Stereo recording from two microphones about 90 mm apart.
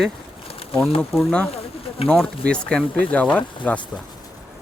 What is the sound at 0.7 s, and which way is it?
Speech, 90° left.